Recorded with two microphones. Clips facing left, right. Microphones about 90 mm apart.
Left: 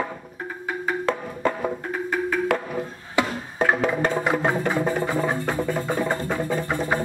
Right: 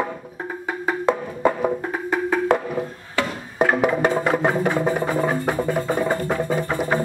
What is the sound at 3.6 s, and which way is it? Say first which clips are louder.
Music: right 3 dB; 10° right (ahead or behind).